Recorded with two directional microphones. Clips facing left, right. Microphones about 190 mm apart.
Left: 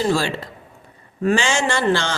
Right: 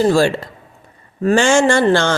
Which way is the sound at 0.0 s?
45° right (ahead or behind).